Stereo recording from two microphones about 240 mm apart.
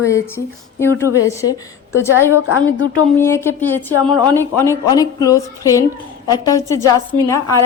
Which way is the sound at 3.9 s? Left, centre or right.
Centre.